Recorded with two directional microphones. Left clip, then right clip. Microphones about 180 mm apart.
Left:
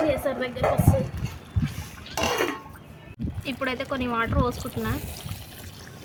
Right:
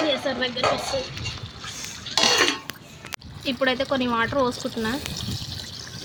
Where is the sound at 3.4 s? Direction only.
35° right (ahead or behind).